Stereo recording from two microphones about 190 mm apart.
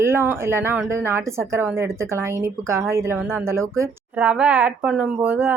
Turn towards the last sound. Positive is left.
turn(degrees=-10)  # may be behind; listen again after turning